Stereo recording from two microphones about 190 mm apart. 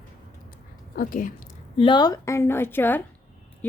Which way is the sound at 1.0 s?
45° left (ahead or behind).